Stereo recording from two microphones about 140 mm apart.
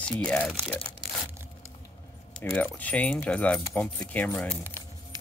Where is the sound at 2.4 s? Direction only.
5° left (ahead or behind).